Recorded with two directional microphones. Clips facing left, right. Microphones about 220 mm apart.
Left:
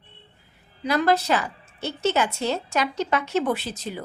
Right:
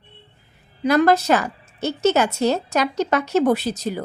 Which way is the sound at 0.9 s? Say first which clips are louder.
Right 5 dB; 45° right (ahead or behind).